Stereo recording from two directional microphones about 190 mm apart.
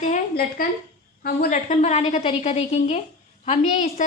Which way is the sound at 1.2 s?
50° left (ahead or behind).